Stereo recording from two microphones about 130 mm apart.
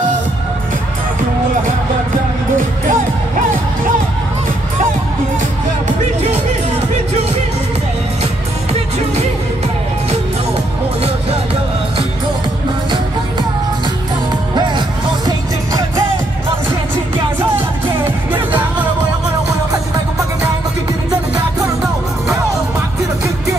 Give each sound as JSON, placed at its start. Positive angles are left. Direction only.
{"t": 2.5, "sound": "music", "side_deg": -90}